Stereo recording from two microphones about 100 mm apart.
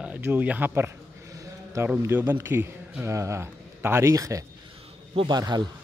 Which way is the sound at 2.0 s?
20° right (ahead or behind).